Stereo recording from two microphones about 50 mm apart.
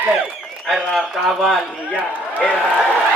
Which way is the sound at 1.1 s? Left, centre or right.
Centre.